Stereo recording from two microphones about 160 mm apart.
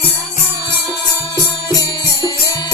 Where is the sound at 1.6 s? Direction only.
25° left (ahead or behind).